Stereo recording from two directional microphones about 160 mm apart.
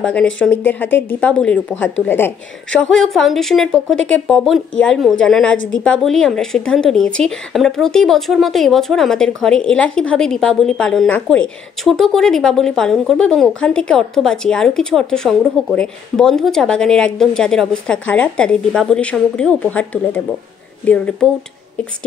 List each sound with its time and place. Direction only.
0.0 s a woman's voice: 10° left (ahead or behind)